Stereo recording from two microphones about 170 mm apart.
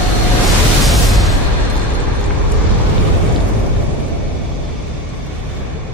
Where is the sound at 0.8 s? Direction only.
Centre (ahead or behind).